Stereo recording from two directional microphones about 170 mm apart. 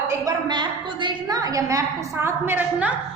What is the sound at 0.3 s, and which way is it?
A woman's voice, 25° right (ahead or behind).